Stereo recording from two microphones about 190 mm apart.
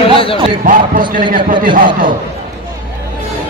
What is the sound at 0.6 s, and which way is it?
A man's voice, 45° right (ahead or behind).